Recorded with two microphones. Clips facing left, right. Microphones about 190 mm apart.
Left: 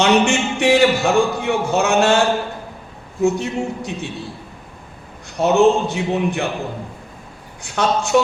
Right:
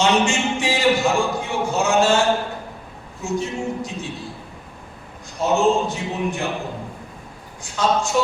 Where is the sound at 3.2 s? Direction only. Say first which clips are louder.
Left 6 dB; 65° left (ahead or behind).